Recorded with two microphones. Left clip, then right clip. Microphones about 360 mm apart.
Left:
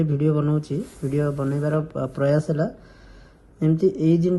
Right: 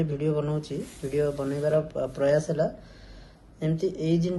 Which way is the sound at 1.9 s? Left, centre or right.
Left.